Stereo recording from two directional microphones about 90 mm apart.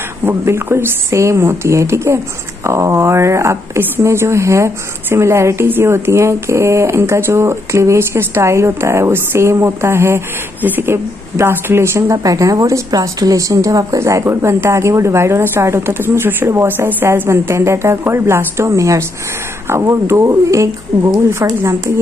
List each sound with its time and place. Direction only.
0.2 s a woman's voice: 30° right (ahead or behind)
12.2 s a woman's voice: 40° right (ahead or behind)